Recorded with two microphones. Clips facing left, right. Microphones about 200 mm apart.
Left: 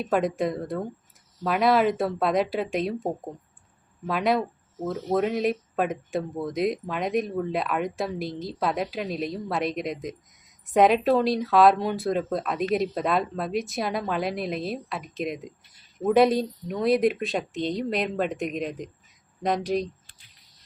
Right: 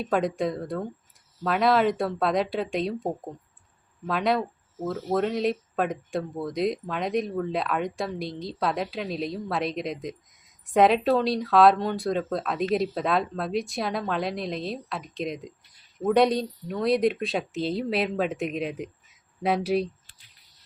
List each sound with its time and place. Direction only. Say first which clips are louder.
0.0 s speech: left 1 dB; centre (ahead or behind)